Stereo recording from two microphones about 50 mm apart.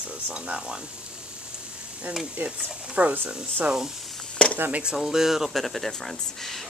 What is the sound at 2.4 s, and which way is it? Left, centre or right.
Speech, right.